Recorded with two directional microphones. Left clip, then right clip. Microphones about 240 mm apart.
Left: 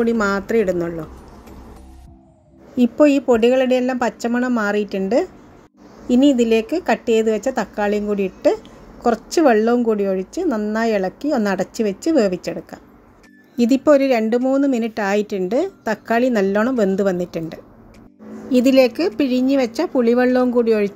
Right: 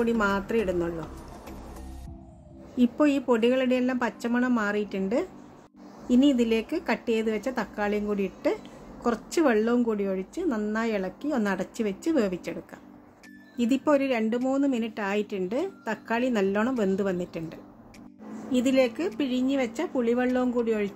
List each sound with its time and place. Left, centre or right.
0.0 s a woman's voice: centre
2.8 s a woman's voice: centre